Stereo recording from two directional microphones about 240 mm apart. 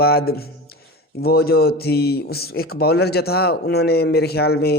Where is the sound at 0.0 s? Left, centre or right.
Left.